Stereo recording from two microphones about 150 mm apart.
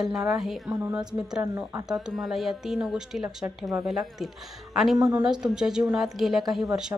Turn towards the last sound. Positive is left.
turn(degrees=0)  # may be behind; listen again after turning